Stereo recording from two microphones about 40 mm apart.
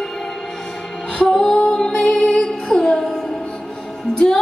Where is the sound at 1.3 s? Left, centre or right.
Centre.